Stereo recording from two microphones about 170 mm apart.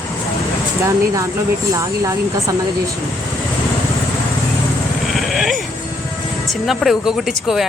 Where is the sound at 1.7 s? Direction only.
20° right (ahead or behind).